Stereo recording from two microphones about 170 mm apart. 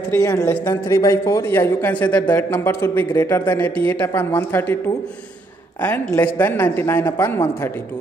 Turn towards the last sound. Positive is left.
turn(degrees=15)  # may be behind; listen again after turning